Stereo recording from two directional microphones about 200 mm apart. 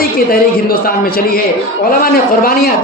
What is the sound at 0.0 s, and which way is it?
A man's voice, 50° left (ahead or behind).